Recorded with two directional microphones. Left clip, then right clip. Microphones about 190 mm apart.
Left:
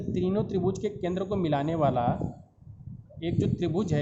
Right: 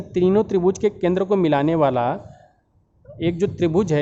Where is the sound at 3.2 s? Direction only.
50° right (ahead or behind).